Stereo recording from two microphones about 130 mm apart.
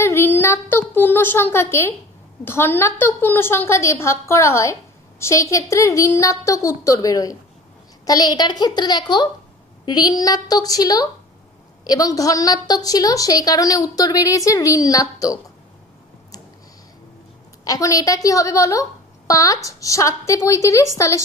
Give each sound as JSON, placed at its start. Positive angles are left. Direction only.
{"t": 0.0, "sound": "a woman's voice", "side_deg": 20}
{"t": 17.6, "sound": "a woman's voice", "side_deg": 25}